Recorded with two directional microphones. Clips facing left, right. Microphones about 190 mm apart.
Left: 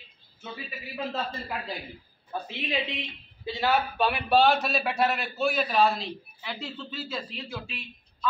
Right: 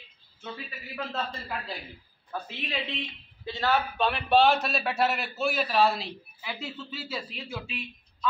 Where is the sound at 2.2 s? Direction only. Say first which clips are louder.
Left 3 dB; 15° left (ahead or behind).